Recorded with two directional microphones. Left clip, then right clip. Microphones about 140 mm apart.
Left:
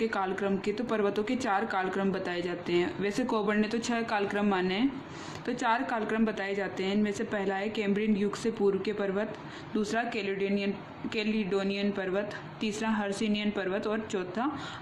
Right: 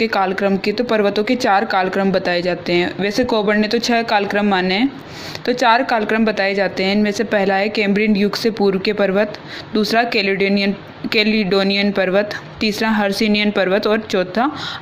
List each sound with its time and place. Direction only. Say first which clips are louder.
0.0 s a woman's voice: right 13 dB; 30° right (ahead or behind)